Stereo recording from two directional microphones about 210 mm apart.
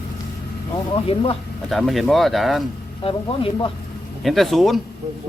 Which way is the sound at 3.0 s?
25° left (ahead or behind).